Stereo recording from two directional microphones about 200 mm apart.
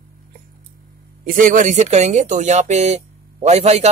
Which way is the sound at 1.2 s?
40° right (ahead or behind).